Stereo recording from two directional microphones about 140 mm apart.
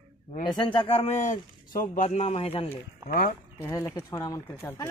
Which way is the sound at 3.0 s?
85° left.